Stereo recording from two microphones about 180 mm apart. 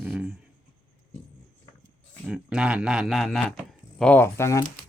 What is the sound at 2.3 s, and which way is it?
Speech, 5° right (ahead or behind).